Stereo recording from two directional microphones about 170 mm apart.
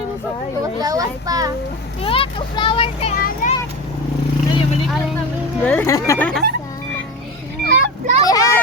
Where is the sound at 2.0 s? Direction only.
35° left (ahead or behind).